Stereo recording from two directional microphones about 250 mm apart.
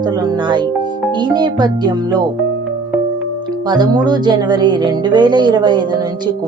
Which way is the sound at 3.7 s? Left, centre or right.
Centre.